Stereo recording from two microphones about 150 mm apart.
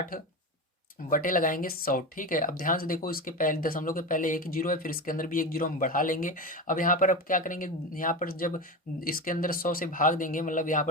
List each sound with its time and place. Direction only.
0.1 s speech: 70° left (ahead or behind)